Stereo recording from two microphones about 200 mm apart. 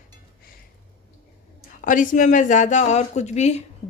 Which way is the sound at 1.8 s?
40° left (ahead or behind).